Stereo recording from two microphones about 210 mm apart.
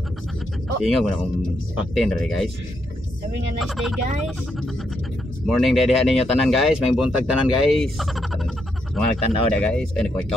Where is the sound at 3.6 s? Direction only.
Centre (ahead or behind).